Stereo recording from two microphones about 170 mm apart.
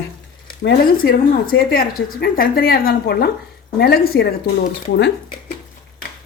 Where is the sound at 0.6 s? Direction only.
75° left (ahead or behind).